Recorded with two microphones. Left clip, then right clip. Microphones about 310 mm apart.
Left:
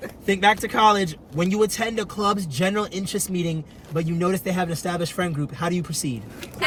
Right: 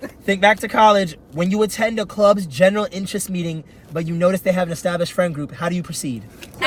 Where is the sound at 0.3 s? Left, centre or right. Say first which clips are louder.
Right 4 dB; centre.